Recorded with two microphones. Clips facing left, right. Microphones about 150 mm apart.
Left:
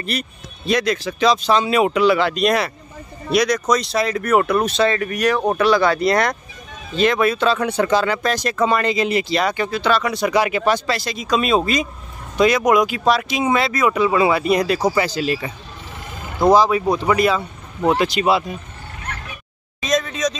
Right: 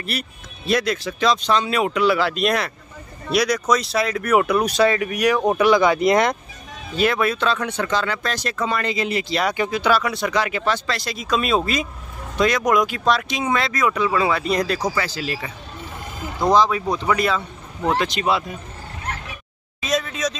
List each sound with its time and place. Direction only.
0.0 s speech: 5° right (ahead or behind)
7.0 s speech: centre (ahead or behind); by 9.2 s 20° left (ahead or behind)
9.5 s speech: 15° right (ahead or behind)
10.3 s speech: 15° left (ahead or behind)
11.0 s speech: centre (ahead or behind); by 15.5 s 20° left (ahead or behind)
16.5 s speech: 5° left (ahead or behind)
19.8 s a sound: 5° right (ahead or behind)